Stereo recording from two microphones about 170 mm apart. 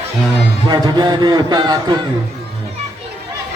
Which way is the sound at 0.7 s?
25° right (ahead or behind).